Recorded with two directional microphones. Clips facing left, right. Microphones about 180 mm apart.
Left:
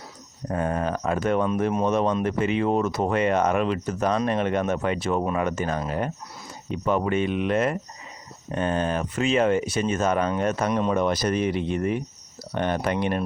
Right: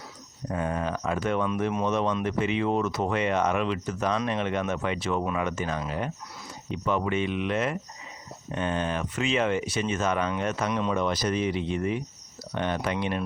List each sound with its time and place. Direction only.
0.5 s speech: 45° left (ahead or behind)